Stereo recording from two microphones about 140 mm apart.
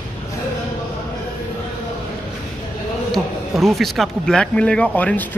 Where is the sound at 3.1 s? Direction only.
Centre (ahead or behind).